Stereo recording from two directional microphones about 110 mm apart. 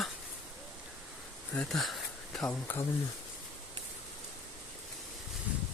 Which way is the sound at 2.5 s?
15° left (ahead or behind).